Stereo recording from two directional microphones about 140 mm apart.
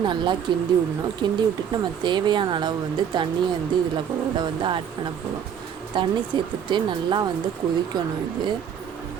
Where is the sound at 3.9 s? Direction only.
35° right (ahead or behind).